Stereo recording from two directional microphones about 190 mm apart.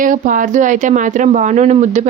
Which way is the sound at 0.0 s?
45° right (ahead or behind).